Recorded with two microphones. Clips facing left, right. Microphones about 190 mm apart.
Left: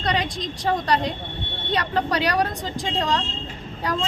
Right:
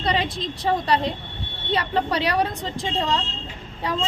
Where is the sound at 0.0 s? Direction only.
5° right (ahead or behind).